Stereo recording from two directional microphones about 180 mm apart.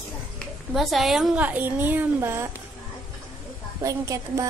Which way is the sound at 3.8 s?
20° right (ahead or behind).